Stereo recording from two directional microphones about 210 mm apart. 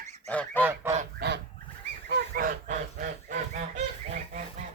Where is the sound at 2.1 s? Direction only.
45° right (ahead or behind).